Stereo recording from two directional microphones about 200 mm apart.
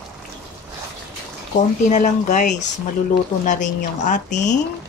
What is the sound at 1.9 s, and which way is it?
Speech, 40° left (ahead or behind).